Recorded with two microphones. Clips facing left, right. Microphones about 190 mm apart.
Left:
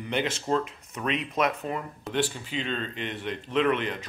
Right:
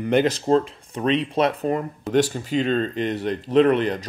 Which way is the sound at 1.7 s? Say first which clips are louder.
Right 10 dB; 45° right (ahead or behind).